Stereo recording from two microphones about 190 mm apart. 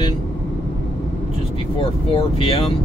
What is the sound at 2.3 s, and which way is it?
Speech, 30° left (ahead or behind).